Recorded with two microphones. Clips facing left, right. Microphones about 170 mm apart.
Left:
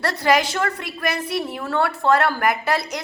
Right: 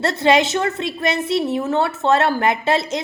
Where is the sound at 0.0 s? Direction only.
25° right (ahead or behind).